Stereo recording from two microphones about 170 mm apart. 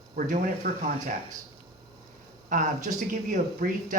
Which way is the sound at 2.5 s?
50° right (ahead or behind).